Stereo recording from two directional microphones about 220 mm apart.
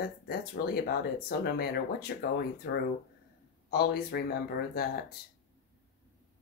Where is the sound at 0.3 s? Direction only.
45° left (ahead or behind).